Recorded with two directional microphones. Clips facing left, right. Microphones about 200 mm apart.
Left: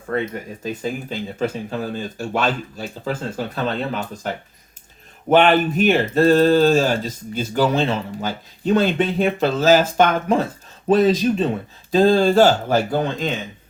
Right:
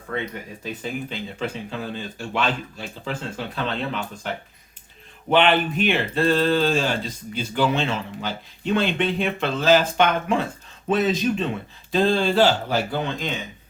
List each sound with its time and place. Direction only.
0.6 s speech: 40° left (ahead or behind)
5.3 s speech: 45° left (ahead or behind)